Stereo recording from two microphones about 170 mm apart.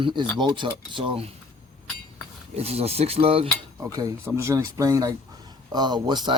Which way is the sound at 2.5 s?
35° right (ahead or behind).